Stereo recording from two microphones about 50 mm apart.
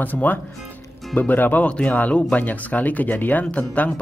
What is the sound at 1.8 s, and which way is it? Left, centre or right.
Speech, left.